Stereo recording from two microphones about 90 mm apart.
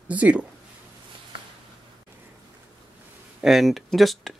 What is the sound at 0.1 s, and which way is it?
Speech, 15° right (ahead or behind).